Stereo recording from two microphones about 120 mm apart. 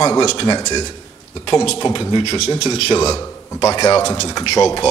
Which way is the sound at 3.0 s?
25° left (ahead or behind).